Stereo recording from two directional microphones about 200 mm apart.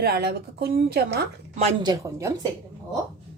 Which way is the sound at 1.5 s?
35° right (ahead or behind).